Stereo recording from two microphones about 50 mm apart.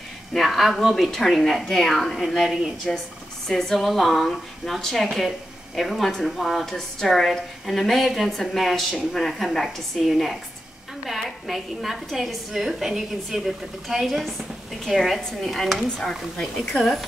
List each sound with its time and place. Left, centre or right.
0.3 s a woman's voice: centre
2.9 s a woman's voice: centre